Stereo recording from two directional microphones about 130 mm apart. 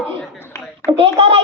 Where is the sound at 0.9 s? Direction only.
45° right (ahead or behind).